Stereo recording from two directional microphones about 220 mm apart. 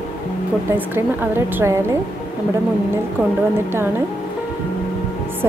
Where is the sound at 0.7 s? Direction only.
10° right (ahead or behind).